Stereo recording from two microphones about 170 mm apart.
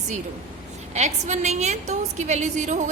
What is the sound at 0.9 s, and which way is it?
A woman's voice, 40° right (ahead or behind).